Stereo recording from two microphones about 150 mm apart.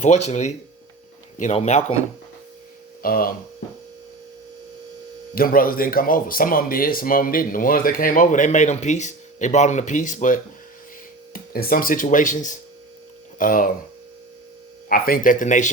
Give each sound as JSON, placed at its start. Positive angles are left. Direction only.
{"t": 0.0, "sound": "a man's voice", "side_deg": 50}
{"t": 3.0, "sound": "speech", "side_deg": 75}
{"t": 5.3, "sound": "speech", "side_deg": 75}
{"t": 11.3, "sound": "speech", "side_deg": 80}
{"t": 12.0, "sound": "a man's voice", "side_deg": 60}
{"t": 14.8, "sound": "a man's voice", "side_deg": 75}